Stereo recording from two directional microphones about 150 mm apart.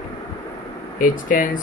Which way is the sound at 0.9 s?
60° left (ahead or behind).